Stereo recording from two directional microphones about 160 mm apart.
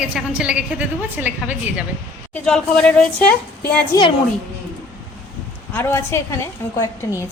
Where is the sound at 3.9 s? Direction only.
30° left (ahead or behind).